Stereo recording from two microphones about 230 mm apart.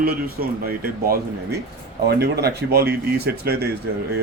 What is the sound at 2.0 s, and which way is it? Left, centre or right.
A man's voice, right.